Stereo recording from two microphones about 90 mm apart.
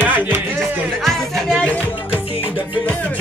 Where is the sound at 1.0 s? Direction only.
5° left (ahead or behind).